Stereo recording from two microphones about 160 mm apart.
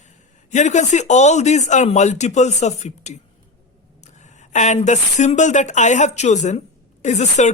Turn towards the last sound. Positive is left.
turn(degrees=45)  # may be behind; listen again after turning